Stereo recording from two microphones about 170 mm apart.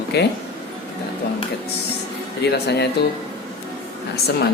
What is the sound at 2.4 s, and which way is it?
Speech, 75° left (ahead or behind).